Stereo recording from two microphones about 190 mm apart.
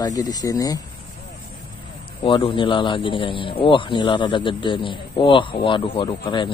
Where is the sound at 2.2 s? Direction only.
25° left (ahead or behind).